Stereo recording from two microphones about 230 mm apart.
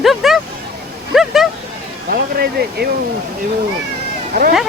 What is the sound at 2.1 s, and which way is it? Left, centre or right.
Speech, right.